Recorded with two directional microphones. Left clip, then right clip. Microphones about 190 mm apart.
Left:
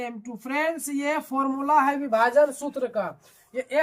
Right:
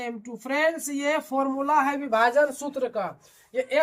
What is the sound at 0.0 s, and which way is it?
Speech, 20° right (ahead or behind).